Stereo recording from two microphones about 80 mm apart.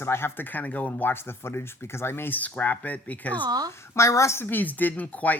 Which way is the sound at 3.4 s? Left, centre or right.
Right.